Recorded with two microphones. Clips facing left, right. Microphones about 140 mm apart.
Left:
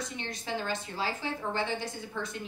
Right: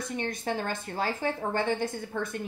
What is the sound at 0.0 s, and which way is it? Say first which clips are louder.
A woman's voice: right 6 dB; 55° right (ahead or behind).